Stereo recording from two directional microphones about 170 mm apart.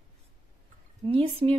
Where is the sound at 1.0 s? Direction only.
30° right (ahead or behind).